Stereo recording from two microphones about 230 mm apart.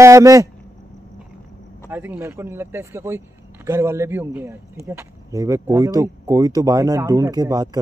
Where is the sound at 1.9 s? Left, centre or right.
Centre.